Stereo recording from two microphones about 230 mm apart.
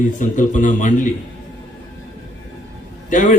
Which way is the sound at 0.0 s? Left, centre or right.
Left.